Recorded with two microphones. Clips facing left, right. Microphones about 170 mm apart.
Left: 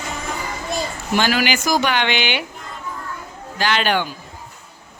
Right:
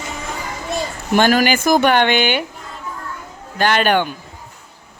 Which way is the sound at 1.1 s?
50° right (ahead or behind).